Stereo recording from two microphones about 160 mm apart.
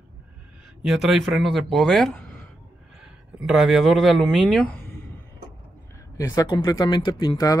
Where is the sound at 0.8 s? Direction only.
Centre (ahead or behind).